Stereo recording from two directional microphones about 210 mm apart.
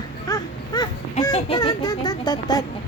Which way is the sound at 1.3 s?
25° left (ahead or behind).